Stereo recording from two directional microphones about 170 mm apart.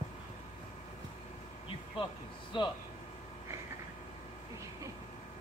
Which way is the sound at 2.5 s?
30° left (ahead or behind).